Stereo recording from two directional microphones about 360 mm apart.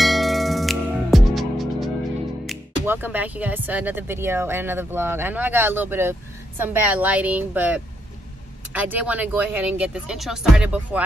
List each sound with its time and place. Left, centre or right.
0.0 s music: centre
2.4 s speech: centre